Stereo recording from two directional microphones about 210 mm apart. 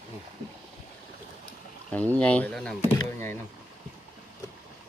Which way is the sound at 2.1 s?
5° left (ahead or behind).